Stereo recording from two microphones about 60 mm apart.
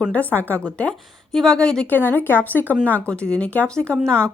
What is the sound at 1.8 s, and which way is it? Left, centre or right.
Speech, left.